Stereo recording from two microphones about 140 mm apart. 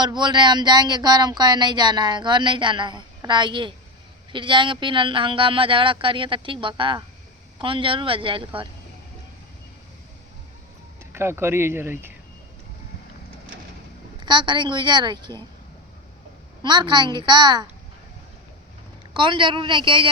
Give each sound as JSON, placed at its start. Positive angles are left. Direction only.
{"t": 0.0, "sound": "speech", "side_deg": -30}
{"t": 11.0, "sound": "speech", "side_deg": -20}
{"t": 14.2, "sound": "speech", "side_deg": -35}
{"t": 16.6, "sound": "speech", "side_deg": -30}
{"t": 19.1, "sound": "speech", "side_deg": -35}